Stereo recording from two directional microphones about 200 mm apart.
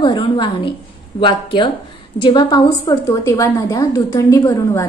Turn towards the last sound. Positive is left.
turn(degrees=15)  # may be behind; listen again after turning